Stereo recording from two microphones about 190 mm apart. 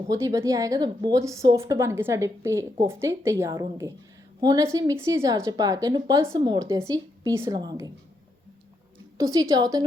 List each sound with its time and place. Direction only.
0.1 s a woman's voice: 15° right (ahead or behind)
9.1 s a woman's voice: 20° right (ahead or behind)